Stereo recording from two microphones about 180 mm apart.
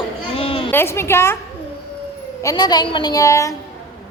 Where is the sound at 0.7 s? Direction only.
15° left (ahead or behind).